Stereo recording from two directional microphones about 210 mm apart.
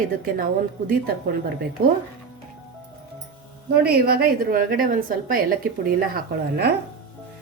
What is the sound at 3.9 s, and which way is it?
A woman's voice, 45° right (ahead or behind).